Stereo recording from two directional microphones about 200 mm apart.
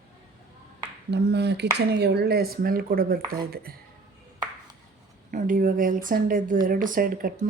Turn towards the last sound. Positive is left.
turn(degrees=-45)  # may be behind; listen again after turning